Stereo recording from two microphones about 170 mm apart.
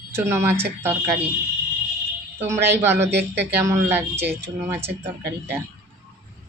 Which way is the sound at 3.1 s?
80° right.